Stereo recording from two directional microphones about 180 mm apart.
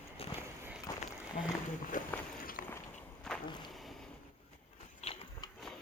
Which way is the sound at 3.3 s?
5° left (ahead or behind).